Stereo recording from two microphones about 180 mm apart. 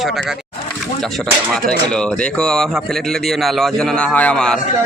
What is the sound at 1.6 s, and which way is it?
A man's voice, 5° left (ahead or behind).